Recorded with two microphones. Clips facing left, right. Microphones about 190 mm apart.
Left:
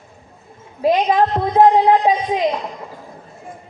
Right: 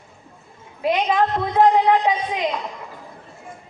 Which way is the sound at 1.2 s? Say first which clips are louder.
Left 2 dB; 35° left (ahead or behind).